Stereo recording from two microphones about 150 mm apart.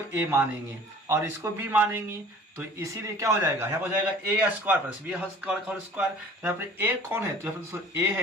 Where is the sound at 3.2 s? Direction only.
20° right (ahead or behind).